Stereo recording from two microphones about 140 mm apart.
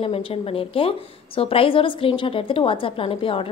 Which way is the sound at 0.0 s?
40° left (ahead or behind).